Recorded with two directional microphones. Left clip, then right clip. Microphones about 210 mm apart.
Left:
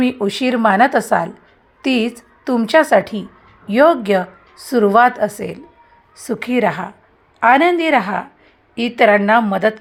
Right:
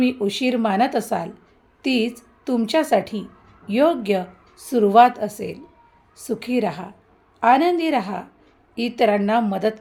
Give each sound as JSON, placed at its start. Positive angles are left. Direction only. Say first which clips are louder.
{"t": 0.0, "sound": "a woman's voice", "louder": "left 3 dB", "side_deg": 15}